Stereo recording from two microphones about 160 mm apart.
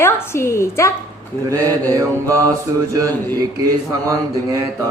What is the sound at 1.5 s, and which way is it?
Speech, 20° right (ahead or behind).